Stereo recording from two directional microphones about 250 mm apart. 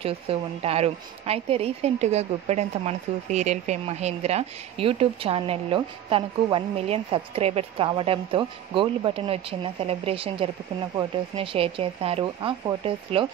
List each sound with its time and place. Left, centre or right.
0.0 s a woman's voice: right